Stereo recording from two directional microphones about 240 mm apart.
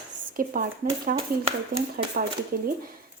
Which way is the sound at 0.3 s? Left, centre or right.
Right.